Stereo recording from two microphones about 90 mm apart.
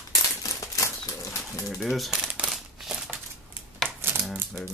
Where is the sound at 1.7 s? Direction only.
Centre (ahead or behind).